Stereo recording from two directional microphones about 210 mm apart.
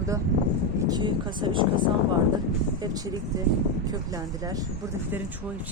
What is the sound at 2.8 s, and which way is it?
Speech, 20° right (ahead or behind).